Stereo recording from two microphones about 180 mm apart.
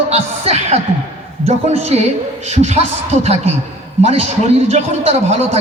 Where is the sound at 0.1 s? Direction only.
35° right (ahead or behind).